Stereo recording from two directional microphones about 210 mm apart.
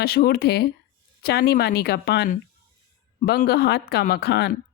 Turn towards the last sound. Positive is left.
turn(degrees=50)  # may be behind; listen again after turning